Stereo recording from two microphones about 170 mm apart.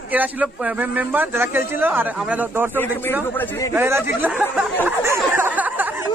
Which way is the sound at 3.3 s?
10° left (ahead or behind).